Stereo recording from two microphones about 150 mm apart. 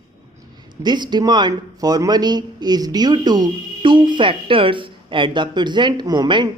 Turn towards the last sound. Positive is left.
turn(degrees=-30)  # may be behind; listen again after turning